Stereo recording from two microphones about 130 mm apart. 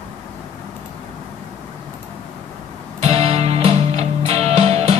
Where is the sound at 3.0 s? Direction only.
55° right (ahead or behind).